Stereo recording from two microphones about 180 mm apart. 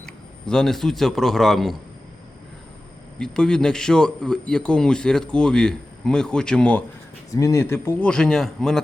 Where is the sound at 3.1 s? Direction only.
5° left (ahead or behind).